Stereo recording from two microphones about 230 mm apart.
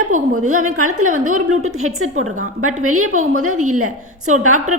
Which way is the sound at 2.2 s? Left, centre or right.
Right.